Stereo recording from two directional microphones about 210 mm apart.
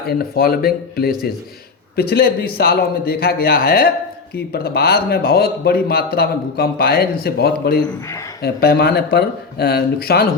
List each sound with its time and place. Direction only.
0.0 s speech: 45° left (ahead or behind)